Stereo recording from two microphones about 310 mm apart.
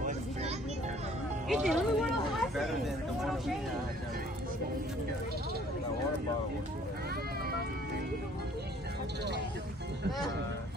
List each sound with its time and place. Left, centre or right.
0.0 s vehicle: centre
1.5 s speech: centre